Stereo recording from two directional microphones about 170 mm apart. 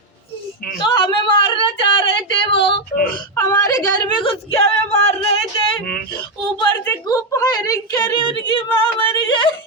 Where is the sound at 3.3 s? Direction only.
20° left (ahead or behind).